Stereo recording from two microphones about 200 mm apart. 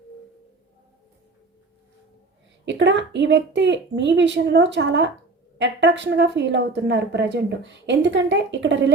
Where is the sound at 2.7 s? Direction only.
60° right (ahead or behind).